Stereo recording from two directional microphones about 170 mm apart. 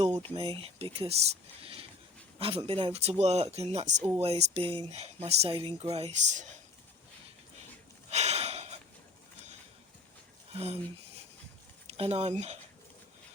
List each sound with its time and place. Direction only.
0.2 s speech: 35° right (ahead or behind)
8.1 s a sound: 40° right (ahead or behind)
10.5 s speech: 35° right (ahead or behind)